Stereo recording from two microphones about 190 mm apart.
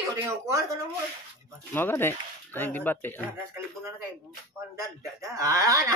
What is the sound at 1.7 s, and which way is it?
Speech, 10° left (ahead or behind).